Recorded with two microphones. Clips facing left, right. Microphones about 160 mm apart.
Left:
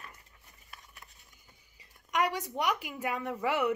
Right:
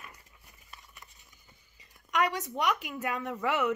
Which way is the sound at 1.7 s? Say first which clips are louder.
Right 1 dB; 10° left (ahead or behind).